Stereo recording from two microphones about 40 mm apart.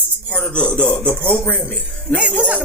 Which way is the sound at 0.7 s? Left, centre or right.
Left.